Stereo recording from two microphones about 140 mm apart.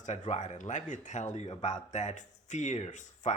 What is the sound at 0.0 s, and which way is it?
Speech, 55° left (ahead or behind).